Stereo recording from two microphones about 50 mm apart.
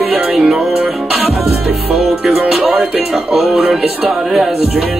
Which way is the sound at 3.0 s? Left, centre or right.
Centre.